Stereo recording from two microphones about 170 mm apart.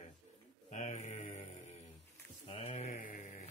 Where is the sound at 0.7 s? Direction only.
45° left (ahead or behind).